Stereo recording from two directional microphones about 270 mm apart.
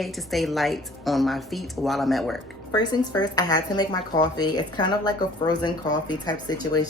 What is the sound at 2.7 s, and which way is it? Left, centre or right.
Speech, centre.